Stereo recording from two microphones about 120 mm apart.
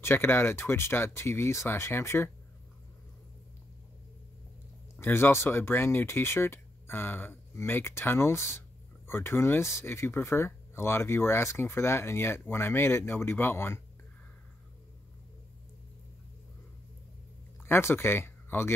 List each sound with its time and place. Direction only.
0.0 s speech: 20° left (ahead or behind)
4.9 s speech: 20° left (ahead or behind)
17.6 s speech: 20° left (ahead or behind)